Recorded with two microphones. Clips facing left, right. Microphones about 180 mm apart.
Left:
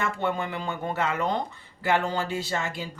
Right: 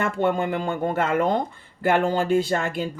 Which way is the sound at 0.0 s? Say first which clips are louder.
Right 6 dB; 50° right (ahead or behind).